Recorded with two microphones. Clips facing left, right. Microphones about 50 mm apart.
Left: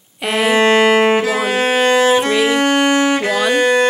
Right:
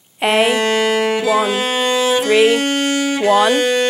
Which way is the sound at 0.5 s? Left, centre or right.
Left.